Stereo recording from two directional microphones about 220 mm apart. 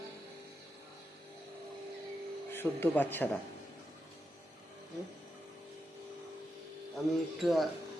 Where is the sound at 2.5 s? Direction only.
10° left (ahead or behind).